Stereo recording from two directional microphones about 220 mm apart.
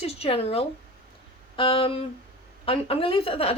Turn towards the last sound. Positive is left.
turn(degrees=25)  # may be behind; listen again after turning